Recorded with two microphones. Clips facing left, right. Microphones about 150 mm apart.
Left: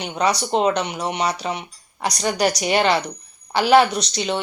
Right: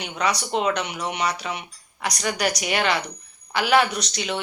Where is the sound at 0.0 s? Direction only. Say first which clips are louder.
Left 4 dB; 30° left (ahead or behind).